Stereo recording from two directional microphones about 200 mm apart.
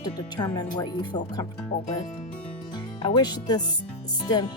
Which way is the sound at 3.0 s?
20° left (ahead or behind).